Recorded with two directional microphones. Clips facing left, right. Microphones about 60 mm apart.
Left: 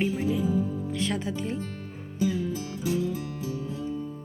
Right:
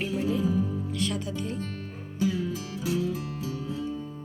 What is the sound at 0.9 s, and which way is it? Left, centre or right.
Speech, left.